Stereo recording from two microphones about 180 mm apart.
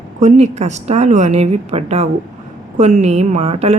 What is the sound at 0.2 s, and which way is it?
Speech, 40° right (ahead or behind).